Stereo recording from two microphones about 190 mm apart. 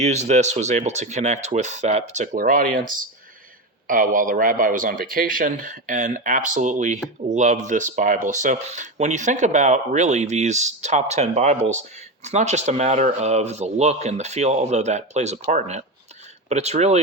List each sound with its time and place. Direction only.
0.0 s speech: 35° right (ahead or behind)